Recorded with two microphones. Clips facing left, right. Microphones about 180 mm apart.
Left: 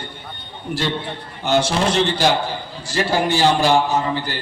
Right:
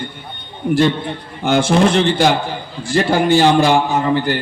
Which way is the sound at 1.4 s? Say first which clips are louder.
Right 5 dB; 55° right (ahead or behind).